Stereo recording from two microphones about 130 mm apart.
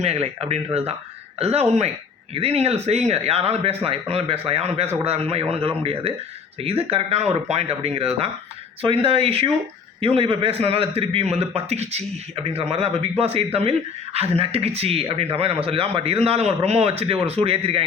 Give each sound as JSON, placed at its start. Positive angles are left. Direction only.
{"t": 0.0, "sound": "a man's voice", "side_deg": -50}